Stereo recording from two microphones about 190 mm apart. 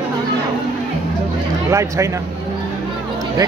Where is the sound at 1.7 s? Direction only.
15° right (ahead or behind).